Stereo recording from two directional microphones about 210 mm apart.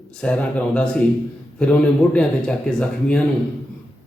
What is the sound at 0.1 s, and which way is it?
Speech, 5° left (ahead or behind).